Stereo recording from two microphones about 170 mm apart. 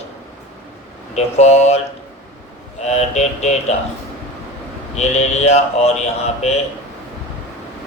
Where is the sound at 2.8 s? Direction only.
40° left (ahead or behind).